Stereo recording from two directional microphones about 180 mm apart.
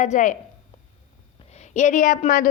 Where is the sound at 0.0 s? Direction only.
45° left (ahead or behind).